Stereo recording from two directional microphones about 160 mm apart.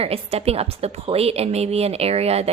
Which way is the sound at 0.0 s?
40° right (ahead or behind).